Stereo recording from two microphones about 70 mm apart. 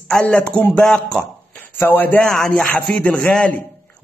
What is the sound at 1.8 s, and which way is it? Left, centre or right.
Speech, left.